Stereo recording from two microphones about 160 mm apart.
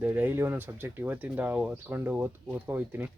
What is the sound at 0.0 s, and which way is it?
Speech, 10° right (ahead or behind).